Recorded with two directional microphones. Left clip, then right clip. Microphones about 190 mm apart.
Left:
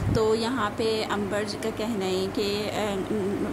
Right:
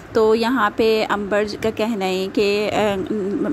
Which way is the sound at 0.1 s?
35° right (ahead or behind).